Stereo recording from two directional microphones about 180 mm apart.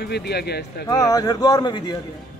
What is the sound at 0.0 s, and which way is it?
Speech, 65° left (ahead or behind).